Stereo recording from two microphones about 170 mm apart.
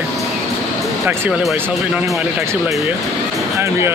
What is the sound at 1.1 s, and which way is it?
Speech, 5° right (ahead or behind).